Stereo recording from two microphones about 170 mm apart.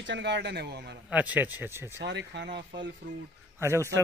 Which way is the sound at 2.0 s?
90° right.